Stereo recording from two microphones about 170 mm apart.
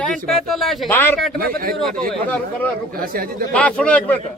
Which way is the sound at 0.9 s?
10° left (ahead or behind).